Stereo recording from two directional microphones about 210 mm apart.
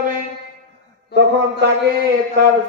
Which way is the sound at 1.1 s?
55° left (ahead or behind).